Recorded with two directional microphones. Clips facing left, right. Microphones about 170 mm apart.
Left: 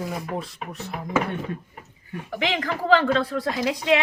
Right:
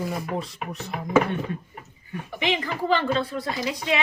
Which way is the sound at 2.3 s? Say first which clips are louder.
Left 1 dB; 90° left.